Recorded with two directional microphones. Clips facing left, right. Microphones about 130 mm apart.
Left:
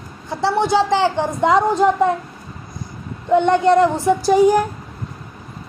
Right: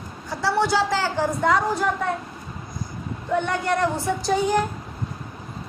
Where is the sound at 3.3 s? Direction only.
20° left (ahead or behind).